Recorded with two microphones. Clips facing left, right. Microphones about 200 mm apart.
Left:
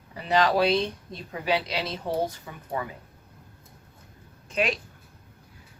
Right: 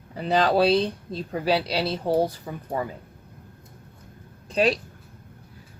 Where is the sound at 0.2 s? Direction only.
35° right (ahead or behind).